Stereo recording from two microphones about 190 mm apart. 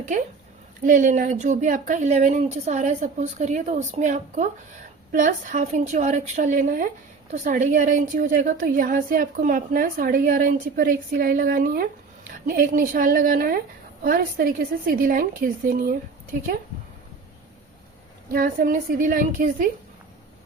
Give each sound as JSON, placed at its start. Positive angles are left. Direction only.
{"t": 0.1, "sound": "a woman's voice", "side_deg": -40}
{"t": 18.3, "sound": "a woman's voice", "side_deg": -50}